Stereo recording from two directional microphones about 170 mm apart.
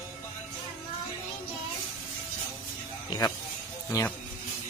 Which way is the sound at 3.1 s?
20° left (ahead or behind).